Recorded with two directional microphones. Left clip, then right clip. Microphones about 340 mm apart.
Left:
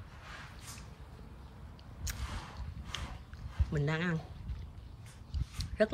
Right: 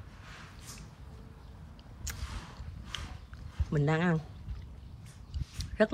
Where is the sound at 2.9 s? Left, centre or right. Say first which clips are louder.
Right 1 dB; centre.